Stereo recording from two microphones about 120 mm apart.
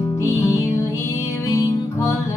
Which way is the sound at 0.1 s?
25° left (ahead or behind).